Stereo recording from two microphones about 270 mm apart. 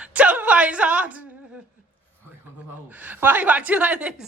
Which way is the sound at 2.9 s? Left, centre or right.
Centre.